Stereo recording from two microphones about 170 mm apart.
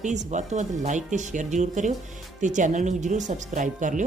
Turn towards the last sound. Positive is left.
turn(degrees=-45)  # may be behind; listen again after turning